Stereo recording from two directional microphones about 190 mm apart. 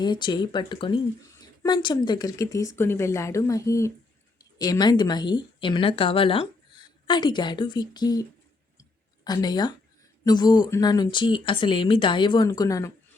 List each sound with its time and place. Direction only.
0.0 s a woman's voice: 25° left (ahead or behind)
8.8 s a sound: 20° left (ahead or behind)
10.2 s speech: 20° left (ahead or behind)